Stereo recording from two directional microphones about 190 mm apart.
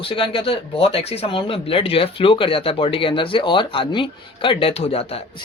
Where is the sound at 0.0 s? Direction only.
30° left (ahead or behind).